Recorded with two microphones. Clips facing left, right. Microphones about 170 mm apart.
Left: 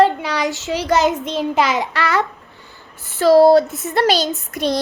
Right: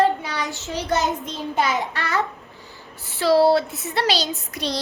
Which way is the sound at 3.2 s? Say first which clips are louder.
Left 6 dB; 45° left (ahead or behind).